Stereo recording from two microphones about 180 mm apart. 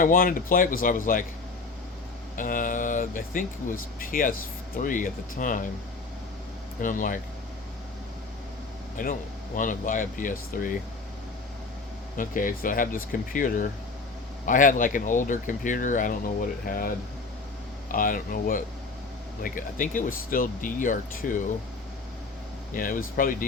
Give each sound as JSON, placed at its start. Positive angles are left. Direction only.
{"t": 0.0, "sound": "speech", "side_deg": 50}
{"t": 2.3, "sound": "speech", "side_deg": 45}
{"t": 6.8, "sound": "speech", "side_deg": 50}
{"t": 9.0, "sound": "speech", "side_deg": 50}
{"t": 12.1, "sound": "speech", "side_deg": 50}
{"t": 22.7, "sound": "speech", "side_deg": 50}